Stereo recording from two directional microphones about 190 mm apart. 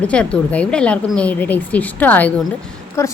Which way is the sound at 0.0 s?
5° left (ahead or behind).